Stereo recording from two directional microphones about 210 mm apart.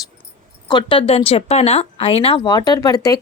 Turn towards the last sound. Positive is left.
turn(degrees=15)  # may be behind; listen again after turning